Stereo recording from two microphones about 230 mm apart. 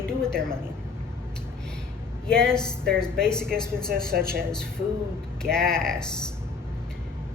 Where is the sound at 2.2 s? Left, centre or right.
Centre.